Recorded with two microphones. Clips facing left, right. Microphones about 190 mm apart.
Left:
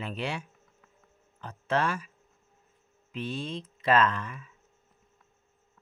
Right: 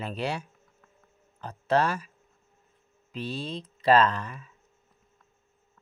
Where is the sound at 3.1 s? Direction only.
35° right (ahead or behind).